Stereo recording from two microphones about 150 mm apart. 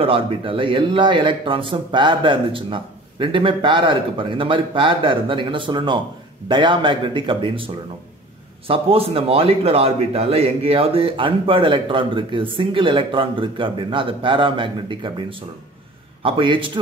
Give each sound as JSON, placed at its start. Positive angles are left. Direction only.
{"t": 0.0, "sound": "a man's voice", "side_deg": -40}
{"t": 8.6, "sound": "a man's voice", "side_deg": -40}